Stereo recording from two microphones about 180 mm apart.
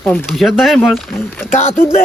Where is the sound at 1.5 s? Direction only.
40° left (ahead or behind).